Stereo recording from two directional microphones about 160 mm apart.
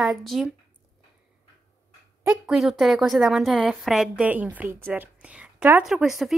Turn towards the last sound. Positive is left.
turn(degrees=0)  # may be behind; listen again after turning